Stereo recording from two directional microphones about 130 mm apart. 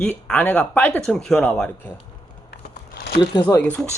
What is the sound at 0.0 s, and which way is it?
Speech, 10° left (ahead or behind).